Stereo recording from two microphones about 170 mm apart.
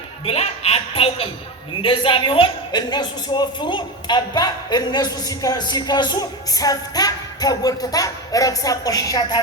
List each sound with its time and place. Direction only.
0.3 s speech: 35° left (ahead or behind); by 9.4 s 20° left (ahead or behind)